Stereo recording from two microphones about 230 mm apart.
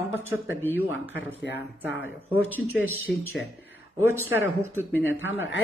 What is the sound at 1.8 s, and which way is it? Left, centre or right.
A woman's voice, centre.